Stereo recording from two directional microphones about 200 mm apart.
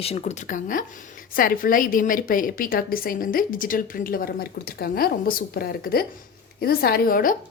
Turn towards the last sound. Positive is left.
turn(degrees=45)  # may be behind; listen again after turning